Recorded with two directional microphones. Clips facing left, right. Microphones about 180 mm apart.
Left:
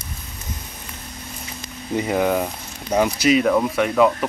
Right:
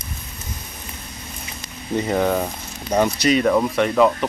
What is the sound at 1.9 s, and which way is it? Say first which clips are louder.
Speech: even; 10° left (ahead or behind).